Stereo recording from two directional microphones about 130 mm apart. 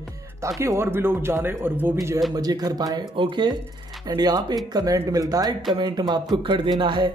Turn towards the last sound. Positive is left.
turn(degrees=-40)  # may be behind; listen again after turning